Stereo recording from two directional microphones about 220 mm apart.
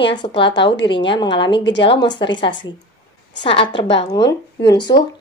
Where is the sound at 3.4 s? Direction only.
25° left (ahead or behind).